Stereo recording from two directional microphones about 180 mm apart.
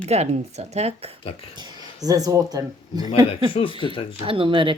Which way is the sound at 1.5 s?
25° right (ahead or behind).